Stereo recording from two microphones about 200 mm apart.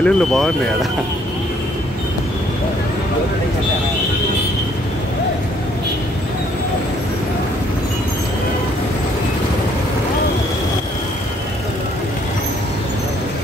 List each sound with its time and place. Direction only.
0.0 s speech: centre (ahead or behind)